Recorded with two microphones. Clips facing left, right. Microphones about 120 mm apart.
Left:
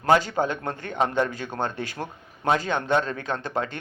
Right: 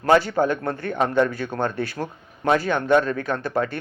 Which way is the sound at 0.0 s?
20° left (ahead or behind).